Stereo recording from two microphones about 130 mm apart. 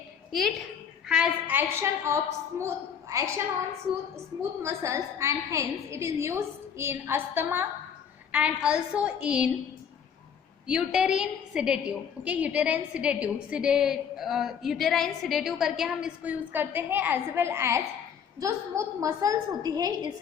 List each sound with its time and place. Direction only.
0.3 s a woman's voice: centre (ahead or behind); by 3.2 s 25° right (ahead or behind)
4.6 s a woman's voice: 20° right (ahead or behind)
10.7 s a woman's voice: 5° right (ahead or behind); by 20.1 s 30° right (ahead or behind)